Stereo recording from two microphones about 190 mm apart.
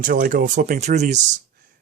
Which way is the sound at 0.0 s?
45° right (ahead or behind).